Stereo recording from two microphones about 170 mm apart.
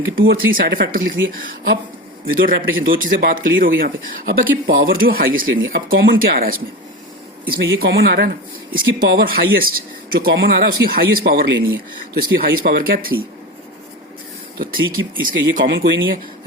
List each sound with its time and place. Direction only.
0.2 s speech: 60° right (ahead or behind)
14.6 s speech: 55° right (ahead or behind)
15.6 s speech: 90° right